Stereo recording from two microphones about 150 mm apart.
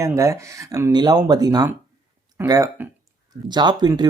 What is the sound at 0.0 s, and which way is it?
Speech, 20° right (ahead or behind).